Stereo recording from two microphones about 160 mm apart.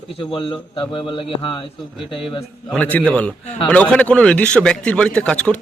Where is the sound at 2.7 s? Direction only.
10° left (ahead or behind).